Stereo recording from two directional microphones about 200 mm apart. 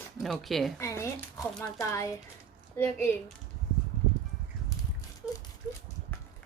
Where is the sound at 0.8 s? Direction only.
15° left (ahead or behind).